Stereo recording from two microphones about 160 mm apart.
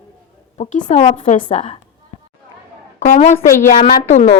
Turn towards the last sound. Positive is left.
turn(degrees=45)  # may be behind; listen again after turning